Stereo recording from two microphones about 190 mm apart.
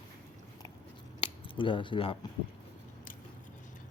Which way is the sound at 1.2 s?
25° left (ahead or behind).